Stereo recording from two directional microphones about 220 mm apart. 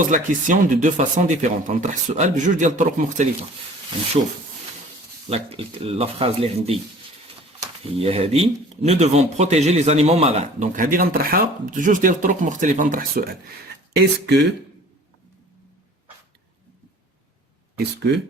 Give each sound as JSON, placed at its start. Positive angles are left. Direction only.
{"t": 0.1, "sound": "speech", "side_deg": -35}
{"t": 5.3, "sound": "speech", "side_deg": -25}
{"t": 7.9, "sound": "speech", "side_deg": -25}